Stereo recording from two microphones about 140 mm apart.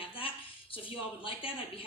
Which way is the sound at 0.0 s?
40° left (ahead or behind).